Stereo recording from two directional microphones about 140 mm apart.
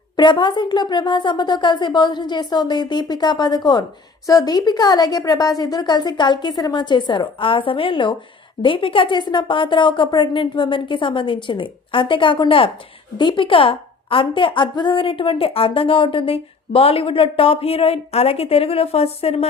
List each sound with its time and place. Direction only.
0.2 s a woman's voice: 30° left (ahead or behind)